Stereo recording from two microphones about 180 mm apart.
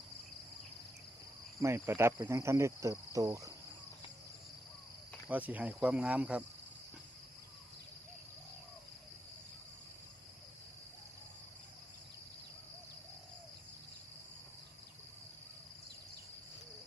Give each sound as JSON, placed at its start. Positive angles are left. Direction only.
{"t": 1.6, "sound": "cricket", "side_deg": -15}
{"t": 5.3, "sound": "cricket", "side_deg": -10}